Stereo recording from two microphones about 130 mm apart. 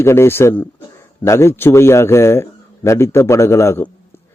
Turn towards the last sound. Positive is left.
turn(degrees=20)  # may be behind; listen again after turning